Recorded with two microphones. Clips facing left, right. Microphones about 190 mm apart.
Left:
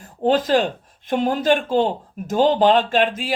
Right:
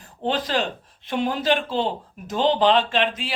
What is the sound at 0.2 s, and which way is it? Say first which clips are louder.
Speech: left 7 dB; 45° left (ahead or behind).